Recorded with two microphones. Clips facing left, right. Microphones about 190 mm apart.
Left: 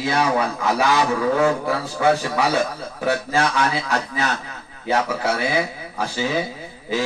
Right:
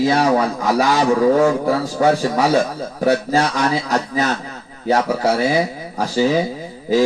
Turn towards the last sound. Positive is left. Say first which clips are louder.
# right 8 dB
turn(degrees=-40)  # may be behind; listen again after turning